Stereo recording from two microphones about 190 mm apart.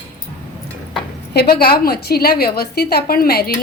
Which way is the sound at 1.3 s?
55° left (ahead or behind).